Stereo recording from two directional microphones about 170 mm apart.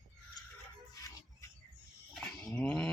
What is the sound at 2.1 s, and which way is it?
Livestock, centre (ahead or behind).